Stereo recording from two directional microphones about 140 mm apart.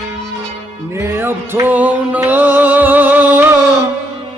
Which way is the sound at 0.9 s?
15° right (ahead or behind).